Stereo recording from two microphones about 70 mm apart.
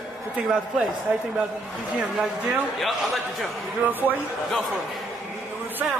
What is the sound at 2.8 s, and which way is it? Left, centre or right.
Speech, centre.